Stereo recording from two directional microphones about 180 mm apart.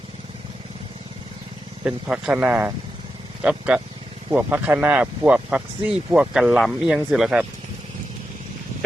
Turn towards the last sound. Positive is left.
turn(degrees=-5)  # may be behind; listen again after turning